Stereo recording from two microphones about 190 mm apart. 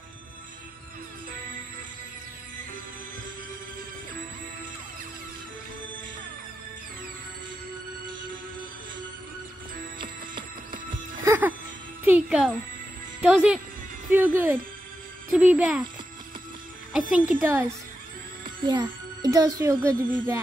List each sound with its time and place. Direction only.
9.9 s music: 25° right (ahead or behind)
11.2 s music: 10° right (ahead or behind)
13.2 s a woman's voice: 5° right (ahead or behind)
16.9 s a woman's voice: 5° right (ahead or behind)
18.6 s speech: 25° right (ahead or behind)